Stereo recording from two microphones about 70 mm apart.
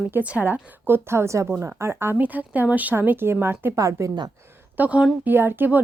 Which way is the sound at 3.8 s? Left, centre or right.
Right.